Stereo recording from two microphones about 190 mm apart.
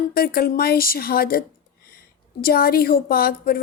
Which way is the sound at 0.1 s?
50° left (ahead or behind).